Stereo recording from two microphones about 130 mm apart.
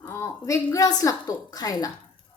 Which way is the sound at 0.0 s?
20° left (ahead or behind).